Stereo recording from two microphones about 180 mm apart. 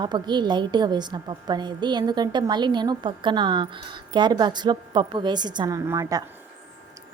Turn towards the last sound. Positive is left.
turn(degrees=-20)  # may be behind; listen again after turning